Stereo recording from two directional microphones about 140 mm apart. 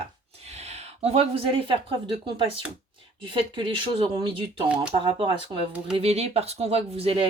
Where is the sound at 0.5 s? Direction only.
50° right (ahead or behind).